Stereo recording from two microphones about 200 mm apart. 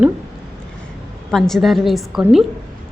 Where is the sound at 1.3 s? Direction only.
Centre (ahead or behind).